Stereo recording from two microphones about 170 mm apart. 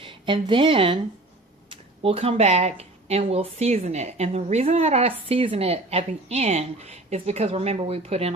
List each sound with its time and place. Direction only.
0.0 s a woman's voice: 30° right (ahead or behind)